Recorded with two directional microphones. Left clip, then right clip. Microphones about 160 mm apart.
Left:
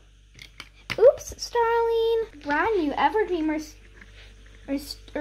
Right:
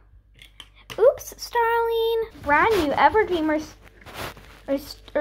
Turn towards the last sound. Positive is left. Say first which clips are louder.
# right 6 dB
turn(degrees=-5)  # may be behind; listen again after turning